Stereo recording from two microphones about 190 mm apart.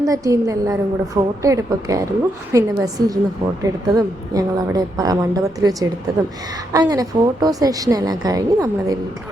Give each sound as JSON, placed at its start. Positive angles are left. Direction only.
{"t": 0.0, "sound": "a woman's voice", "side_deg": -15}